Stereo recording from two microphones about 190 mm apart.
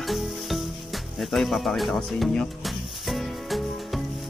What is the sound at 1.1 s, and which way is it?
Music, centre (ahead or behind).